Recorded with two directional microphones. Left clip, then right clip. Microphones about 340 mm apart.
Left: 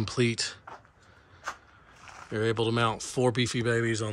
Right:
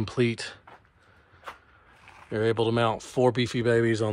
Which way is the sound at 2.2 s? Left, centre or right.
Centre.